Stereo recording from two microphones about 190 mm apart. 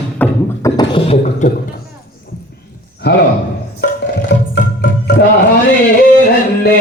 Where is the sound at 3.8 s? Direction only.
60° left (ahead or behind).